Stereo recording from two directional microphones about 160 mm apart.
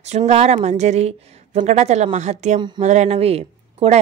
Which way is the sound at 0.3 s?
40° right (ahead or behind).